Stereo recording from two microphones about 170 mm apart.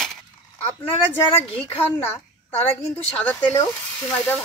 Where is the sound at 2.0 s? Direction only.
15° left (ahead or behind).